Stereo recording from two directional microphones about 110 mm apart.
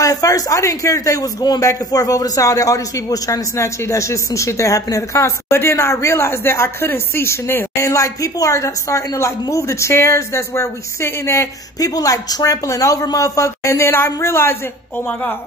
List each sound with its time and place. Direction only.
0.0 s speech: 30° left (ahead or behind)